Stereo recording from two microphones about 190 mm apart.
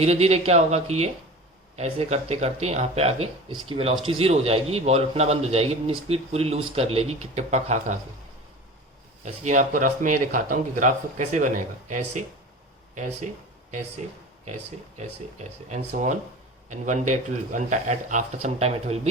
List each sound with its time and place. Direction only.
0.0 s a man's voice: 35° right (ahead or behind)
9.2 s a man's voice: 40° right (ahead or behind)
16.6 s a man's voice: 40° right (ahead or behind)